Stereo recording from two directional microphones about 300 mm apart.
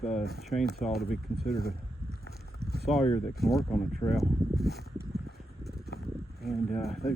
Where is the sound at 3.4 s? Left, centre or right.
Centre.